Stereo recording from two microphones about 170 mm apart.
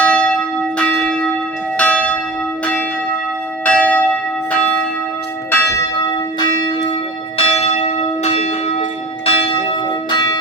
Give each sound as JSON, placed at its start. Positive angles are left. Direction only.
{"t": 0.0, "sound": "church bell", "side_deg": 5}
{"t": 3.6, "sound": "church bell", "side_deg": 10}
{"t": 7.3, "sound": "church bell", "side_deg": 35}